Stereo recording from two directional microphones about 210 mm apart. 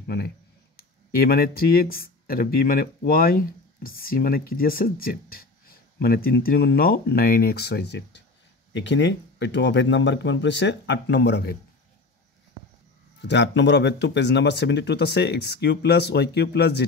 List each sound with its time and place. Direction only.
0.0 s speech: 50° left (ahead or behind)
13.2 s speech: 55° left (ahead or behind)